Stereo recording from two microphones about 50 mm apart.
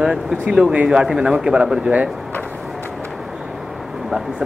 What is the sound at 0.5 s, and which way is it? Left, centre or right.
Speech, centre.